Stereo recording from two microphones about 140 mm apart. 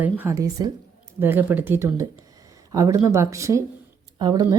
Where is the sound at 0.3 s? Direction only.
25° right (ahead or behind).